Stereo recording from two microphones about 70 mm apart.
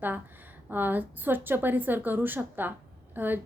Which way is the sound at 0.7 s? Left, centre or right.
Right.